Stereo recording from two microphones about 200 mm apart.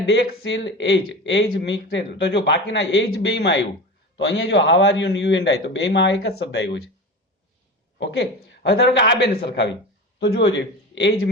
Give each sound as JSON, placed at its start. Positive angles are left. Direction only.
{"t": 0.0, "sound": "speech", "side_deg": 60}
{"t": 7.9, "sound": "a man's voice", "side_deg": 65}